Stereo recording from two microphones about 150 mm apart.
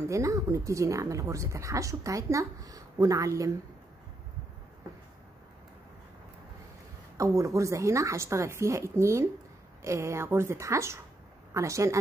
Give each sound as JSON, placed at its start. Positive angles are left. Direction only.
{"t": 0.0, "sound": "speech", "side_deg": -20}
{"t": 7.2, "sound": "a woman's voice", "side_deg": -20}